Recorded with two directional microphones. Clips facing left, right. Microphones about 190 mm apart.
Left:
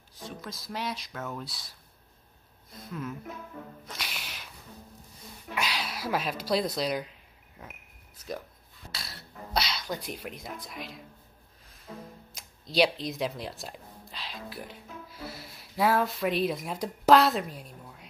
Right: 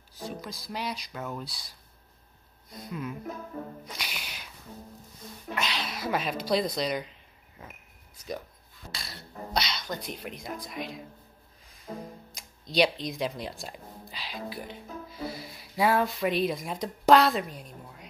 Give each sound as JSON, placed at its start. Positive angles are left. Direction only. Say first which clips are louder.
{"t": 0.4, "sound": "speech", "louder": "left 4 dB", "side_deg": 0}
{"t": 2.9, "sound": "speech", "louder": "right 1 dB", "side_deg": -5}
{"t": 3.3, "sound": "speech", "louder": "right 4 dB", "side_deg": -40}
{"t": 3.8, "sound": "music", "louder": "right 1 dB", "side_deg": 0}
{"t": 5.5, "sound": "speech", "louder": "even", "side_deg": 5}
{"t": 9.5, "sound": "speech", "louder": "left 1 dB", "side_deg": 5}
{"t": 11.9, "sound": "speech", "louder": "right 4 dB", "side_deg": -40}
{"t": 12.4, "sound": "speech", "louder": "even", "side_deg": 5}